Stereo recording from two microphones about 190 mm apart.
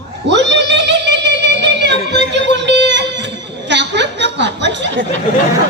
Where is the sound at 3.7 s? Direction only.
65° right (ahead or behind).